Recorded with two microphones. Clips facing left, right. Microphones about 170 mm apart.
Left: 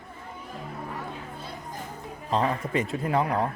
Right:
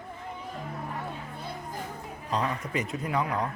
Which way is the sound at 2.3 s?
25° left (ahead or behind).